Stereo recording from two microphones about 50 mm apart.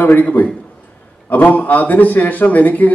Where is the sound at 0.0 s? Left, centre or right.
Left.